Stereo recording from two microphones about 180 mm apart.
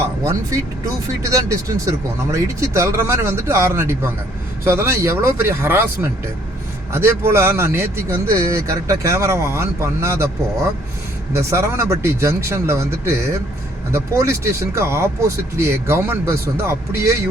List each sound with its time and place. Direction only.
1.2 s speech: 15° right (ahead or behind)